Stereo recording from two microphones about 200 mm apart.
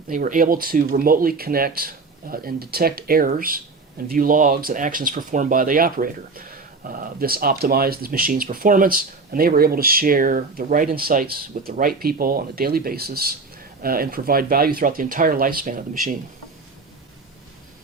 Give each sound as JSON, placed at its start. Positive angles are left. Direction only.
{"t": 0.1, "sound": "speech", "side_deg": -45}